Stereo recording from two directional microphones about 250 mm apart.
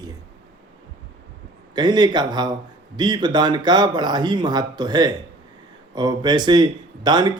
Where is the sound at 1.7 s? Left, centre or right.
Centre.